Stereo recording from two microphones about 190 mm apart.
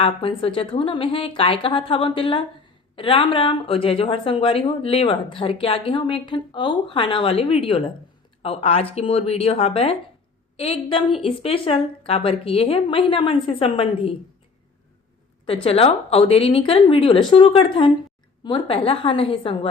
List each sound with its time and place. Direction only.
0.0 s a woman's voice: 30° left (ahead or behind)
15.4 s a woman's voice: 30° left (ahead or behind)